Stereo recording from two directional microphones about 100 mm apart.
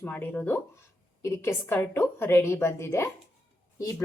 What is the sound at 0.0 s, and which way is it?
A woman's voice, 15° left (ahead or behind).